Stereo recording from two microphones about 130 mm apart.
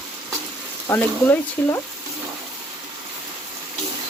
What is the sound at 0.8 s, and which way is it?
Speech, 20° left (ahead or behind).